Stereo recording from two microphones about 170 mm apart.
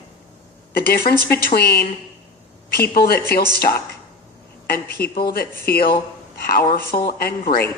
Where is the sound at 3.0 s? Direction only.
65° left (ahead or behind).